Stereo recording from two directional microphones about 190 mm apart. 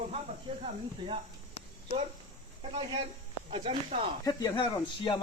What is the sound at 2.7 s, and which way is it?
Speech, 25° right (ahead or behind).